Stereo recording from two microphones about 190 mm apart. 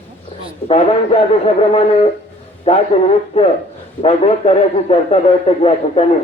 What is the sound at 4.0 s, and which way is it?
A man's voice, 30° left (ahead or behind).